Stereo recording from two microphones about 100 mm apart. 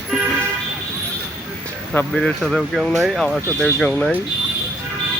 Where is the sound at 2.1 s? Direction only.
5° left (ahead or behind).